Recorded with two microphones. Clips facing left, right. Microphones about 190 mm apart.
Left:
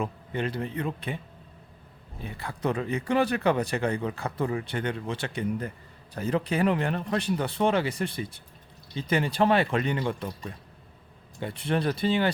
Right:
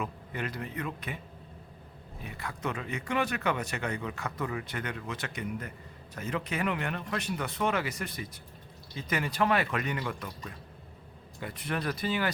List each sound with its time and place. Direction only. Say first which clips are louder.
0.0 s speech: left 6 dB; 30° left (ahead or behind)
2.2 s speech: left 6 dB; 30° left (ahead or behind)